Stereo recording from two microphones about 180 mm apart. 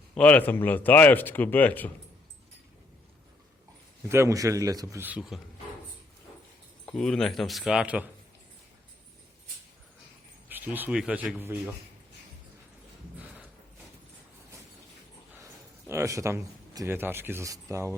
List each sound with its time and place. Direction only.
0.1 s speech: 5° left (ahead or behind)
4.1 s speech: 15° right (ahead or behind)
6.8 s speech: 5° left (ahead or behind)
10.5 s speech: 10° right (ahead or behind)
13.1 s a sound: 10° right (ahead or behind)
15.9 s speech: 15° right (ahead or behind)